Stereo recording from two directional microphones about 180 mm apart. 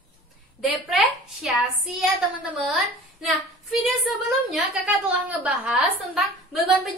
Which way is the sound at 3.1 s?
Centre (ahead or behind).